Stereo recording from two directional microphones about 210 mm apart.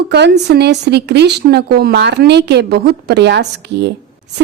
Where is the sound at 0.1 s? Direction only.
55° right (ahead or behind).